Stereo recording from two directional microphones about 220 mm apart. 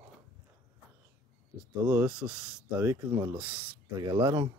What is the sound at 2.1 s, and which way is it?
Speech, 5° right (ahead or behind).